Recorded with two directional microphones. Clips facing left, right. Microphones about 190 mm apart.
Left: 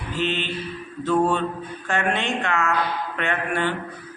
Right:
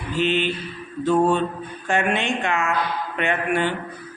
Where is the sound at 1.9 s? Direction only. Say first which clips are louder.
Right 2 dB; 15° right (ahead or behind).